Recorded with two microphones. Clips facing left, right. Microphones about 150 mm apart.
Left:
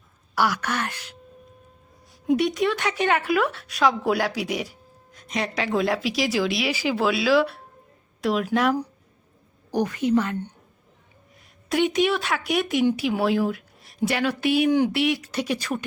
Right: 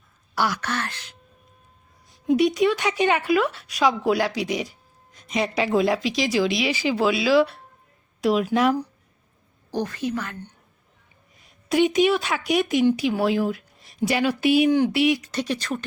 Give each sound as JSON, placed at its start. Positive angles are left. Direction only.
{"t": 0.3, "sound": "speech", "side_deg": 10}
{"t": 2.3, "sound": "speech", "side_deg": 0}
{"t": 9.7, "sound": "a woman's voice", "side_deg": 15}
{"t": 11.7, "sound": "speech", "side_deg": 0}
{"t": 14.7, "sound": "speech", "side_deg": 5}